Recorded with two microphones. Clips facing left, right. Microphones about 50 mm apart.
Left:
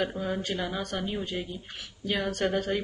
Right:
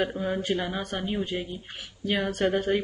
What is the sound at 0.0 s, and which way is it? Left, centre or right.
A woman's voice, centre.